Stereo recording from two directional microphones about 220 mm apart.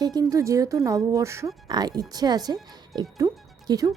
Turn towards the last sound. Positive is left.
turn(degrees=-20)  # may be behind; listen again after turning